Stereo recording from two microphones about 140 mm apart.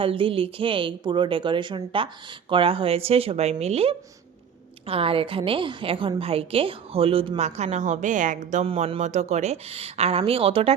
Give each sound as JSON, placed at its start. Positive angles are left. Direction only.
{"t": 0.0, "sound": "a woman's voice", "side_deg": -40}
{"t": 8.6, "sound": "a woman's voice", "side_deg": -45}